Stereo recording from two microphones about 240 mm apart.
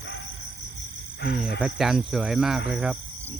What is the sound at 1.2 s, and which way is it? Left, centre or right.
Speech, left.